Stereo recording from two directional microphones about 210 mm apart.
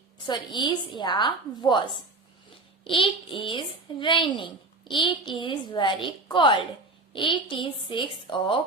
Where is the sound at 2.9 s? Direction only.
25° left (ahead or behind).